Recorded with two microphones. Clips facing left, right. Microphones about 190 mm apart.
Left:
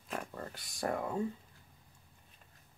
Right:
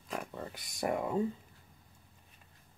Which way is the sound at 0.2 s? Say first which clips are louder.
Right 2 dB; 10° right (ahead or behind).